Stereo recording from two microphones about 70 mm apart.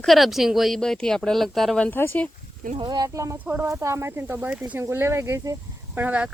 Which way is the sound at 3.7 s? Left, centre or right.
Right.